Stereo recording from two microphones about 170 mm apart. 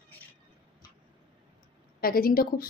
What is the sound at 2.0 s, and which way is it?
Speech, 60° left (ahead or behind).